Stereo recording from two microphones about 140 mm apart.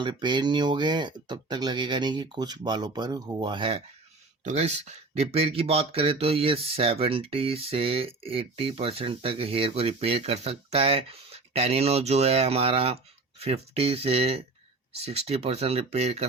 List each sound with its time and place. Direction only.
0.0 s speech: 35° right (ahead or behind)
4.4 s speech: 50° right (ahead or behind)